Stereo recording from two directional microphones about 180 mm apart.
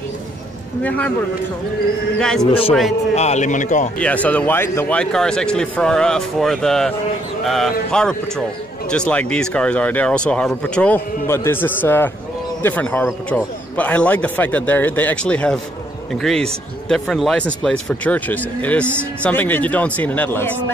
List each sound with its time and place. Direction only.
0.8 s speech: 10° left (ahead or behind)
2.1 s speech: 5° left (ahead or behind)
3.2 s a man's voice: 40° left (ahead or behind)
4.0 s speech: 10° left (ahead or behind)